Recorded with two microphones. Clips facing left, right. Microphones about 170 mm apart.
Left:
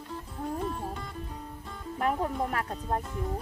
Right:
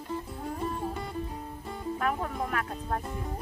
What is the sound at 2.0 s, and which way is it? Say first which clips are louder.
Speech: left 4 dB; 25° left (ahead or behind).